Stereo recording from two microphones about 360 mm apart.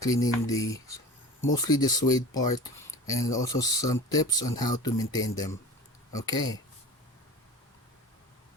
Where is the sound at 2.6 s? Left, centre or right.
Centre.